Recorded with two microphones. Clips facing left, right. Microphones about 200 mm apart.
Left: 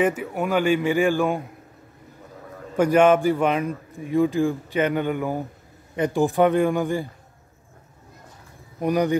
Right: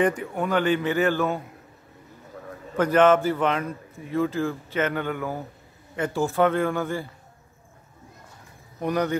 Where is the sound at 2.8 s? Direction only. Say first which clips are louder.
Left 2 dB; 10° left (ahead or behind).